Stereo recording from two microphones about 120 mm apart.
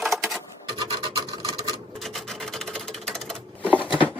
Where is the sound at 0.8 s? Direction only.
45° right (ahead or behind).